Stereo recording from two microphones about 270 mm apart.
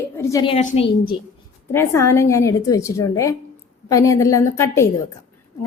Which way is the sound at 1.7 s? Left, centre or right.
Centre.